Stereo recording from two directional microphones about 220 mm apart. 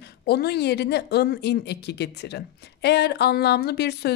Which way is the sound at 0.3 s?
45° left (ahead or behind).